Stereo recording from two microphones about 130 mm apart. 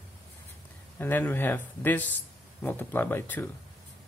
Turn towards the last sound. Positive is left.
turn(degrees=15)  # may be behind; listen again after turning